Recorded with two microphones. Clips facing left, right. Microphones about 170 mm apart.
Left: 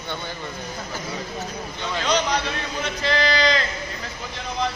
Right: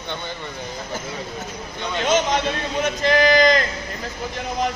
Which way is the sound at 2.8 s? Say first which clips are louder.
Right 6 dB; 45° right (ahead or behind).